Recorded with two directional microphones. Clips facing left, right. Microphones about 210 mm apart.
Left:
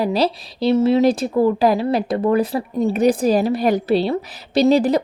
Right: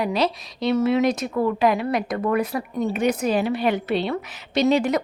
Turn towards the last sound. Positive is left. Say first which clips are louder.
# left 5 dB
turn(degrees=35)  # may be behind; listen again after turning